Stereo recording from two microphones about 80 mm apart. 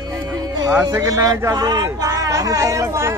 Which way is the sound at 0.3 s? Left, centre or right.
Right.